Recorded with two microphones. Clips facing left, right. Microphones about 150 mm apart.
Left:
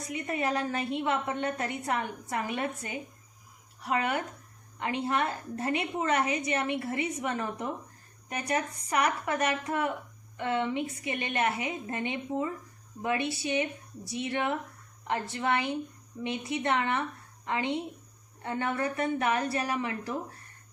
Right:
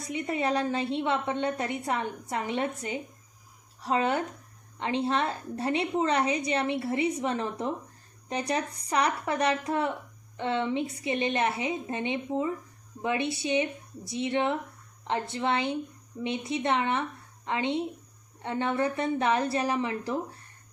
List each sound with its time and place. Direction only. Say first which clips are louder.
0.1 s a woman's voice: right 3 dB; 25° right (ahead or behind)